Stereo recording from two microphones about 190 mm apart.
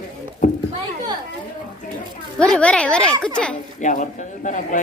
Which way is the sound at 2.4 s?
5° left (ahead or behind).